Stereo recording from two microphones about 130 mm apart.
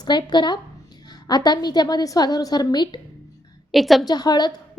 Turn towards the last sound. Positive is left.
turn(degrees=30)  # may be behind; listen again after turning